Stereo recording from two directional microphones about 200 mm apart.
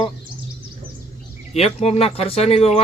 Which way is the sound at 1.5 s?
30° left (ahead or behind).